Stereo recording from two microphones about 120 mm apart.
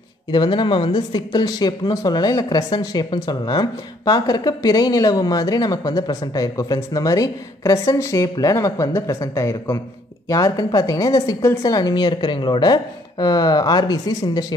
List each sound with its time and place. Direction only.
0.3 s speech: 35° left (ahead or behind)